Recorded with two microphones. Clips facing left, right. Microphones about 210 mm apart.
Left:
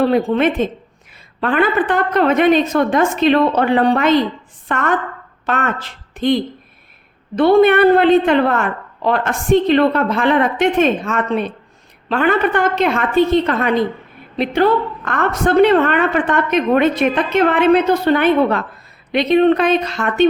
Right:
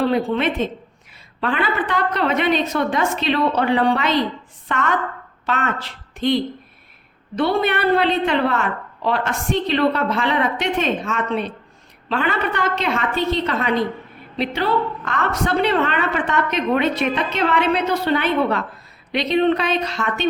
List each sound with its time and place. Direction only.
0.1 s a woman's voice: 50° left (ahead or behind)